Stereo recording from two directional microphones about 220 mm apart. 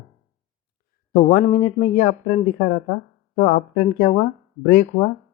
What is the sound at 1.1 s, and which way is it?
Speech, 40° left (ahead or behind).